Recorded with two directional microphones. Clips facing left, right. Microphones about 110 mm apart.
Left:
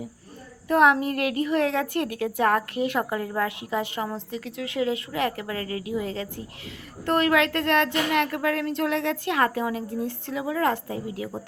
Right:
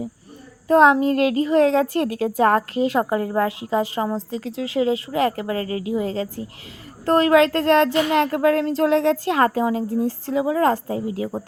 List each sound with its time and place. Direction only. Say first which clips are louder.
0.7 s a woman's voice: right 5 dB; 25° right (ahead or behind)